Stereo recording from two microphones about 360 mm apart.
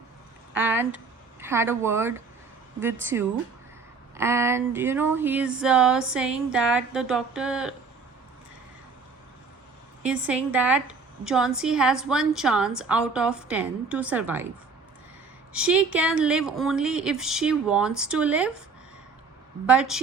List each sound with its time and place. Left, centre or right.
0.5 s a sound: centre
1.4 s a woman's voice: centre
10.0 s a woman's voice: centre
15.5 s a woman's voice: centre
19.6 s a woman's voice: centre